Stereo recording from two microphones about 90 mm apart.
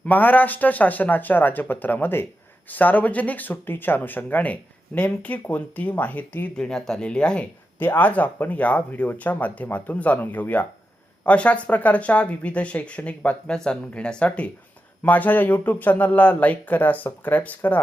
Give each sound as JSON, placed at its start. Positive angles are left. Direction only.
{"t": 0.0, "sound": "speech", "side_deg": 20}
{"t": 6.6, "sound": "speech", "side_deg": 5}